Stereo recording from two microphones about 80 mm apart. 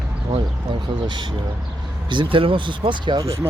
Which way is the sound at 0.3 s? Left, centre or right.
Right.